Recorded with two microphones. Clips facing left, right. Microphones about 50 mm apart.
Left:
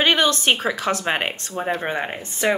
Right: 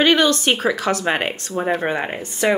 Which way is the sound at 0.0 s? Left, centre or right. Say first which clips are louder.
Right 3 dB; left.